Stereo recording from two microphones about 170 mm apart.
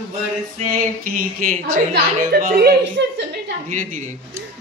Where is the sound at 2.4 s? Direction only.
60° right (ahead or behind); by 3.5 s 90° right.